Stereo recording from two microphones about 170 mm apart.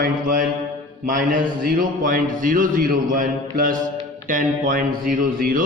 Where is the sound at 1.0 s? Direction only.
50° right (ahead or behind).